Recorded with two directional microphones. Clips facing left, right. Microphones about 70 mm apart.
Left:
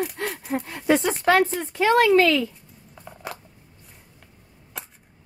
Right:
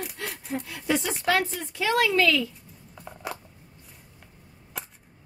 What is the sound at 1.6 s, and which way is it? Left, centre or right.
Speech, left.